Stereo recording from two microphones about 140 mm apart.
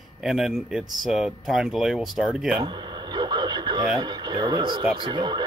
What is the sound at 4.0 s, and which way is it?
Speech, 30° right (ahead or behind).